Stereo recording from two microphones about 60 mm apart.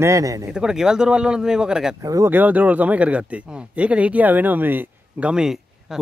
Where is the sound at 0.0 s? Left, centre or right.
Right.